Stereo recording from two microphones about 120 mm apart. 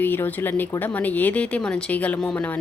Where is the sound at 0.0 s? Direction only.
15° left (ahead or behind).